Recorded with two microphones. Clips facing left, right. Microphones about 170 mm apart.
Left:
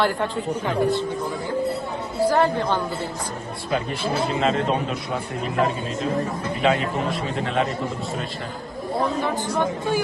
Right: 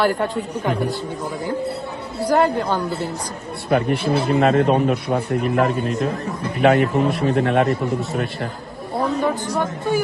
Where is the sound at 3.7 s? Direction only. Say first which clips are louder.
Right 6 dB; 60° right (ahead or behind).